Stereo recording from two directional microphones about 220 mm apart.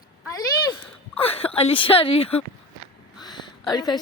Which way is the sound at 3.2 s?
20° left (ahead or behind).